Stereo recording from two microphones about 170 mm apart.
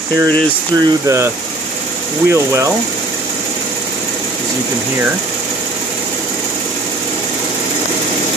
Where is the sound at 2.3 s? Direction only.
15° right (ahead or behind).